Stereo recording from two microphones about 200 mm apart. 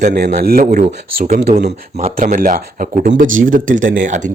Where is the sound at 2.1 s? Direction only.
45° right (ahead or behind).